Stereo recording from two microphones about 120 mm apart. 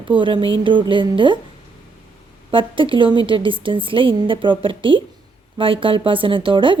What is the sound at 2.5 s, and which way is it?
A woman's voice, 45° right (ahead or behind).